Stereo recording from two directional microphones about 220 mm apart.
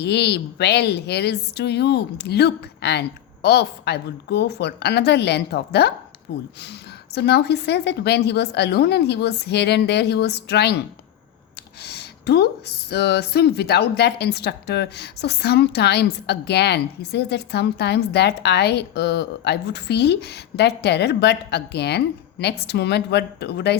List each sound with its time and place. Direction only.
0.0 s speech: 50° left (ahead or behind)
11.8 s speech: 50° left (ahead or behind)